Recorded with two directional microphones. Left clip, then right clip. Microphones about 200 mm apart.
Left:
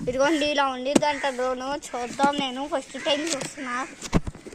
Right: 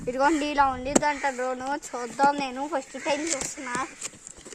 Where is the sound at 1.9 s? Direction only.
40° right (ahead or behind).